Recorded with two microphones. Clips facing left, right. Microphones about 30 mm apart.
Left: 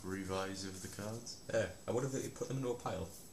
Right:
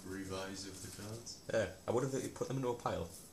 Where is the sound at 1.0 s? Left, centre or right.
Centre.